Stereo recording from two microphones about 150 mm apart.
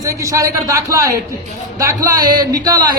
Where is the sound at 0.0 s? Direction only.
20° right (ahead or behind).